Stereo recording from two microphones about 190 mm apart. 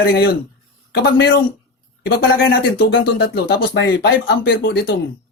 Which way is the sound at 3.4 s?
65° left (ahead or behind).